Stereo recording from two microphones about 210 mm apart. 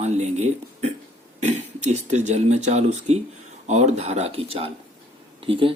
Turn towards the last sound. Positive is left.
turn(degrees=-25)  # may be behind; listen again after turning